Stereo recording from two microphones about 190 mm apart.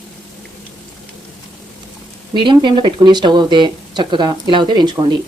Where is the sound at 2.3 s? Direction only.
25° right (ahead or behind).